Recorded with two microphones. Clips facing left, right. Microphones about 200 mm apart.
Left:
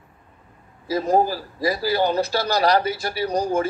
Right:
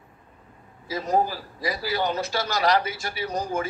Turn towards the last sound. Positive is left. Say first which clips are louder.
# left 6 dB
turn(degrees=40)  # may be behind; listen again after turning